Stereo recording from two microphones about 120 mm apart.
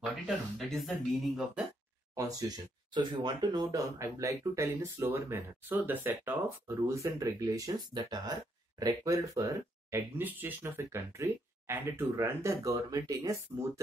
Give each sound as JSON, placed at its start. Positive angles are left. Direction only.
{"t": 0.6, "sound": "speech", "side_deg": 0}
{"t": 2.1, "sound": "speech", "side_deg": -30}